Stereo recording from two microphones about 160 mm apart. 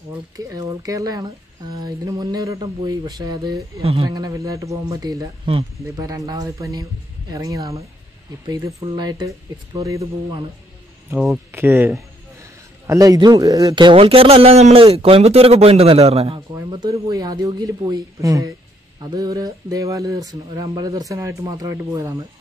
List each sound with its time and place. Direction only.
0.5 s speech: 20° right (ahead or behind)
3.8 s a man's voice: 40° right (ahead or behind)
4.1 s speech: 20° right (ahead or behind)
5.4 s a man's voice: 35° right (ahead or behind)
5.9 s a man's voice: 20° right (ahead or behind); by 16.3 s 40° right (ahead or behind)
16.3 s speech: 25° right (ahead or behind)